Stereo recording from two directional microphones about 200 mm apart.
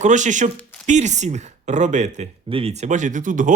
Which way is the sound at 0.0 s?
35° right (ahead or behind).